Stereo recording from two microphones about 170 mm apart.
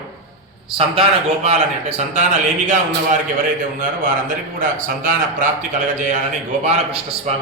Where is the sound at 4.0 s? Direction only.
55° right (ahead or behind).